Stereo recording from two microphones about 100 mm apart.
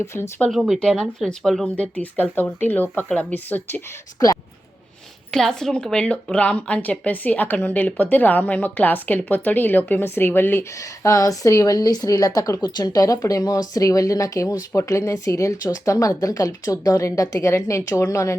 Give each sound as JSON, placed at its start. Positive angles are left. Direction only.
{"t": 0.0, "sound": "speech", "side_deg": 25}
{"t": 0.5, "sound": "speech", "side_deg": 0}
{"t": 5.3, "sound": "a woman's voice", "side_deg": 5}